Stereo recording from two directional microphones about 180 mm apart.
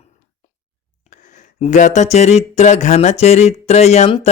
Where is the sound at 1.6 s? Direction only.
40° left (ahead or behind).